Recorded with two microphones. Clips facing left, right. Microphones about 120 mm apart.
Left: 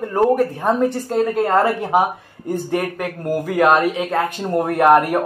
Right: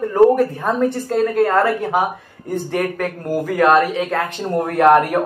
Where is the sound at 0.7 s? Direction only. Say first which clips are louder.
Even; 15° left (ahead or behind).